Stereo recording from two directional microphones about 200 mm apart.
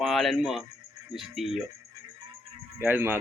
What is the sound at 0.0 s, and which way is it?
Speech, centre (ahead or behind).